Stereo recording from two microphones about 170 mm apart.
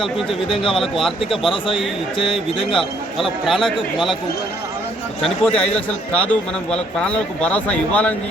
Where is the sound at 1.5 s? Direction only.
30° left (ahead or behind).